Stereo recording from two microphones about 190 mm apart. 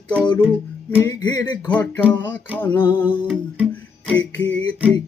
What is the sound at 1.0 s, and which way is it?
Music, 15° left (ahead or behind).